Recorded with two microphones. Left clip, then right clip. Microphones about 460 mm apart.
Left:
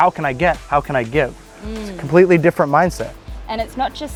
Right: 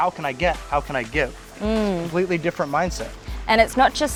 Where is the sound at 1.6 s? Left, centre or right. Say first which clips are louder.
Right 8 dB; right.